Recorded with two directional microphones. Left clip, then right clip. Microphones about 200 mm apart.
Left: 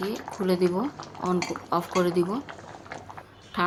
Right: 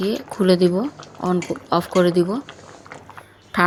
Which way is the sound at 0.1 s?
25° right (ahead or behind).